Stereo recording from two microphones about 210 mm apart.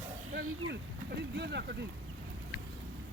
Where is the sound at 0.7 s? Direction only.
55° right (ahead or behind).